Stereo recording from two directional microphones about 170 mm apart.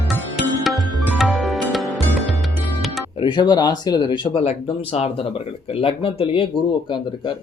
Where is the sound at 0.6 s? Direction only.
Centre (ahead or behind).